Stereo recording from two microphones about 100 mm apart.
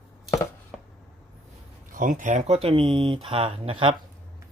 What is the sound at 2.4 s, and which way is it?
Speech, 85° right.